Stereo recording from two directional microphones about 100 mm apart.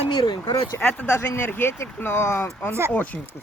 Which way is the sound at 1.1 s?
25° left (ahead or behind).